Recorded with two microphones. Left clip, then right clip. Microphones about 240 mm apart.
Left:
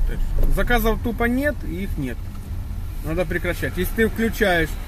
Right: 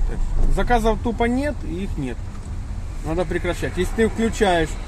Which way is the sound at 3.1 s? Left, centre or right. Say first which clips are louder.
Even; right.